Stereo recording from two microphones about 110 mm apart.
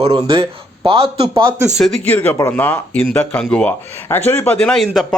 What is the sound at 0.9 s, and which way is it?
Speech, 60° right (ahead or behind).